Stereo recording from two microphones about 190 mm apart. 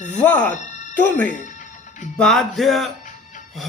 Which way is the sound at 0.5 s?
40° left (ahead or behind).